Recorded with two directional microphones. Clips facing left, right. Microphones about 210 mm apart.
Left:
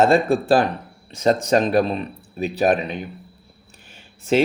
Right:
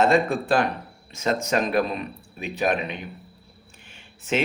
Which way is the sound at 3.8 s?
35° left (ahead or behind).